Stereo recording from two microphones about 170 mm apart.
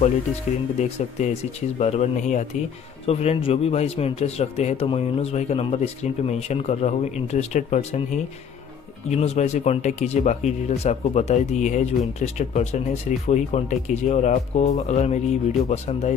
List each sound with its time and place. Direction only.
0.7 s a man's voice: 40° left (ahead or behind)